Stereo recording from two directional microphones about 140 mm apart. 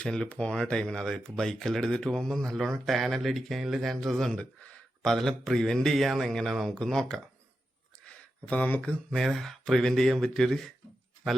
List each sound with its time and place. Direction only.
0.0 s speech: 5° left (ahead or behind)